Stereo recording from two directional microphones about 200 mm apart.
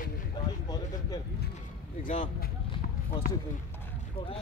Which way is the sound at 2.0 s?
40° left (ahead or behind).